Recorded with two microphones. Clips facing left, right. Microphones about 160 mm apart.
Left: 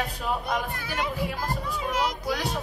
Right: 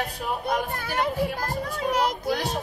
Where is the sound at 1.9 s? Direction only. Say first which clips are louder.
Right 3 dB; 35° right (ahead or behind).